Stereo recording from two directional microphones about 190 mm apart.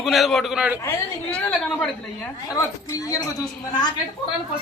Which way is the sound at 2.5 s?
15° left (ahead or behind).